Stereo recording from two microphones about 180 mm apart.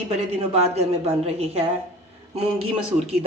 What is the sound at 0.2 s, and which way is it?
Speech, 35° right (ahead or behind).